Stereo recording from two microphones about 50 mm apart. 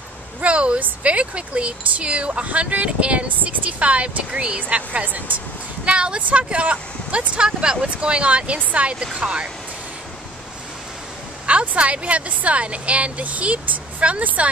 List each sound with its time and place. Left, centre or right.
0.4 s speech: right
5.9 s speech: right
11.4 s speech: right